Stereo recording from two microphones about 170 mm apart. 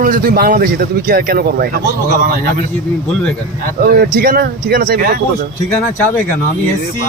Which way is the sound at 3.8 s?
60° right (ahead or behind).